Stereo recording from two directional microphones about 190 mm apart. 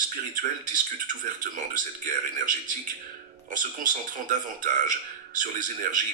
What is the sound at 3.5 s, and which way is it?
Speech, 45° right (ahead or behind).